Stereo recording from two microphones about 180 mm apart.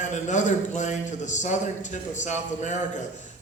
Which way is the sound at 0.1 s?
40° left (ahead or behind).